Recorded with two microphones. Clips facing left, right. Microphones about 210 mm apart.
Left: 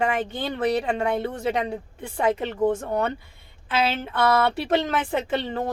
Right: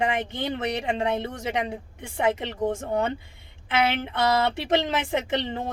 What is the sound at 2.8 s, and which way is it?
Speech, 20° right (ahead or behind).